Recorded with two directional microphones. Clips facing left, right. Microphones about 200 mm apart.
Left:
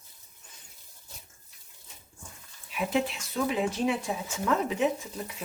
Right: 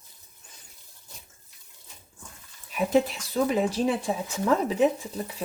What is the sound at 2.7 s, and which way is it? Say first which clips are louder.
Speech: right 5 dB; 40° right (ahead or behind).